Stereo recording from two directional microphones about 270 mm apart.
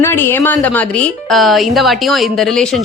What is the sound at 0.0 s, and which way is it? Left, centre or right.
A woman's voice, centre.